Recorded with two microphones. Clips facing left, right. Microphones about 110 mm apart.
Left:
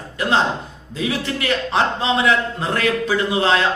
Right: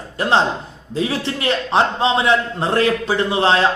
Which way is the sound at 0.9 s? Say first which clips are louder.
Right 2 dB; 30° right (ahead or behind).